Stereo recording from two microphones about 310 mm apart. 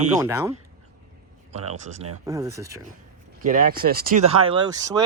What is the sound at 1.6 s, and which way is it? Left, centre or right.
Speech, right.